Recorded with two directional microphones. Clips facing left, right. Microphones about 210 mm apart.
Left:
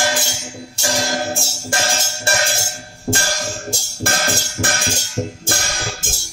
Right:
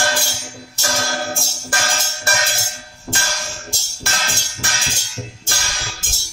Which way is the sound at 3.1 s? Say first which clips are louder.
Left 6 dB; 45° left (ahead or behind).